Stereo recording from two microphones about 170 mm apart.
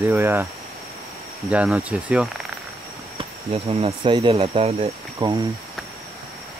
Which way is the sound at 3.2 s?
35° right (ahead or behind).